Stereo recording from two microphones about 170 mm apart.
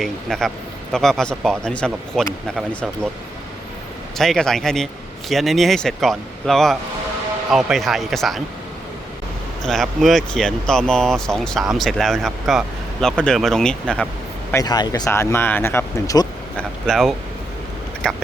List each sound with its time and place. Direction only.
0.0 s speech: centre (ahead or behind)
4.2 s speech: 5° left (ahead or behind)
9.6 s speech: centre (ahead or behind)
14.5 s speech: 25° left (ahead or behind)
16.6 s speech: 5° left (ahead or behind)